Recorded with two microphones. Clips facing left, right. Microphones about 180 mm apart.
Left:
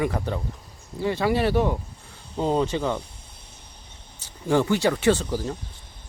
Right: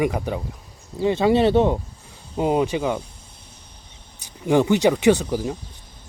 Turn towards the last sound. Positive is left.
turn(degrees=-15)  # may be behind; listen again after turning